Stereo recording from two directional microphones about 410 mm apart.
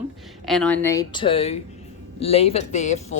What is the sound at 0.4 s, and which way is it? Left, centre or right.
A woman's voice, centre.